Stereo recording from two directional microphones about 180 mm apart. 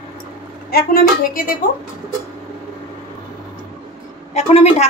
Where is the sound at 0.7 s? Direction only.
55° left (ahead or behind).